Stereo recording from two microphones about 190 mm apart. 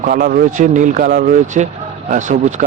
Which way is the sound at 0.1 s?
50° right (ahead or behind).